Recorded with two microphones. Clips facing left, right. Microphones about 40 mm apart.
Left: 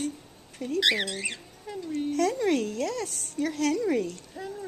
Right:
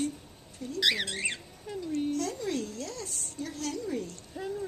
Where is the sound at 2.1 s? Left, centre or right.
Left.